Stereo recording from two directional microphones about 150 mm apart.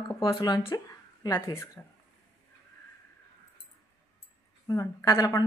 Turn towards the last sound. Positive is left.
turn(degrees=20)  # may be behind; listen again after turning